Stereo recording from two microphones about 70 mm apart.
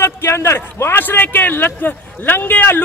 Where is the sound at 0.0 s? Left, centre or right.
Left.